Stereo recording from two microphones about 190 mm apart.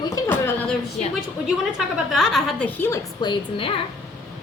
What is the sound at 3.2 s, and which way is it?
Speech, 25° left (ahead or behind).